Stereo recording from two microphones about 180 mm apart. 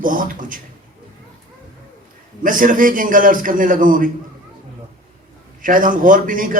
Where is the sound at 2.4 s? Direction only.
50° right (ahead or behind).